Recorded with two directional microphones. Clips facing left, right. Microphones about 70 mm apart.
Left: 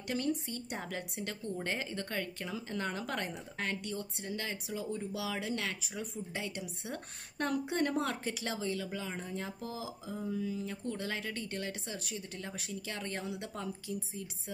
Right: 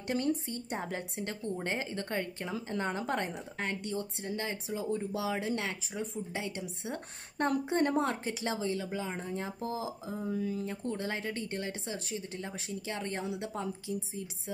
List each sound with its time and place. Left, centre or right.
0.1 s a woman's voice: right